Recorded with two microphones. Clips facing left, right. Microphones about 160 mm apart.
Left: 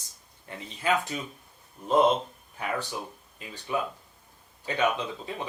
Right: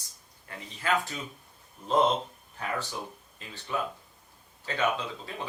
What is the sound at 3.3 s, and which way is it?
Speech, 15° left (ahead or behind).